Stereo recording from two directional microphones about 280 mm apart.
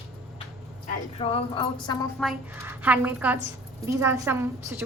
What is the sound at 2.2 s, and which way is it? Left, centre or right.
A woman's voice, centre.